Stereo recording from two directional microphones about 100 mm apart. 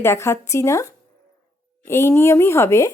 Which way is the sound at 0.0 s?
25° left (ahead or behind).